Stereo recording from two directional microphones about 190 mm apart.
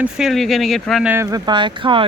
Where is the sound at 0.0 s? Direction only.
Centre (ahead or behind).